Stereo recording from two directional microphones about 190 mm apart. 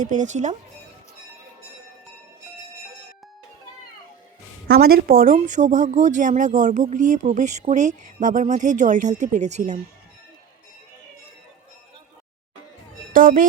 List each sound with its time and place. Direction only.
0.0 s speech: 40° right (ahead or behind)
4.7 s speech: 55° right (ahead or behind); by 9.8 s 35° right (ahead or behind)
13.1 s speech: 45° right (ahead or behind)